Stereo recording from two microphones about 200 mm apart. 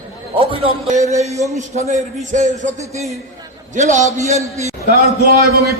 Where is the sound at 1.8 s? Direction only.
35° right (ahead or behind).